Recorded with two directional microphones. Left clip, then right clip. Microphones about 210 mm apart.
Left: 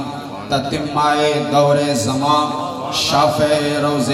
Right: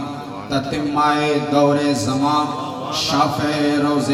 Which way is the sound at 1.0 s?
25° left (ahead or behind).